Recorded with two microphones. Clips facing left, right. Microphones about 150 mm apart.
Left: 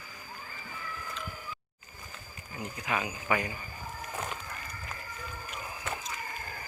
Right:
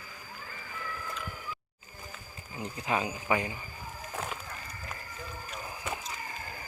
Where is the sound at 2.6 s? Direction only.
30° right (ahead or behind).